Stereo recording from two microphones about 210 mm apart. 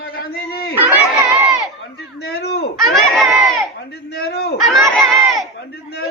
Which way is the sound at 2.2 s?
50° left (ahead or behind).